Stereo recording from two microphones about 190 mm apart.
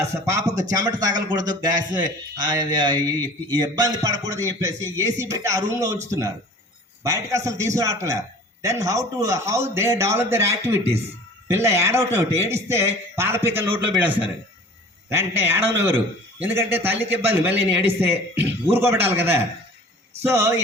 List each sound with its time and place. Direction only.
0.3 s speech: 15° right (ahead or behind)